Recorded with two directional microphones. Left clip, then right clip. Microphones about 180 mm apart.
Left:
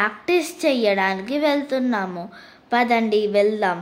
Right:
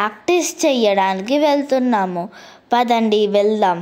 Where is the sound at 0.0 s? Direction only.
30° right (ahead or behind).